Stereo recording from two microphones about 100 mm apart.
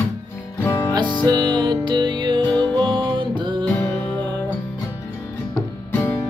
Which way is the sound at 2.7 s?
55° right (ahead or behind).